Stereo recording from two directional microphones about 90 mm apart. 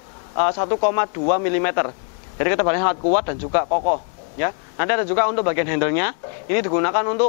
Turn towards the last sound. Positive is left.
turn(degrees=20)  # may be behind; listen again after turning